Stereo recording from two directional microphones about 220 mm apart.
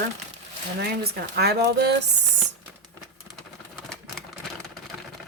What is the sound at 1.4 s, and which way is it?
Speech, 45° right (ahead or behind).